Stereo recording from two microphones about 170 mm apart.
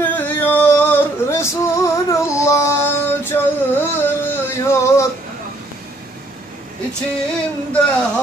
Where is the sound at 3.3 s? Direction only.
10° left (ahead or behind).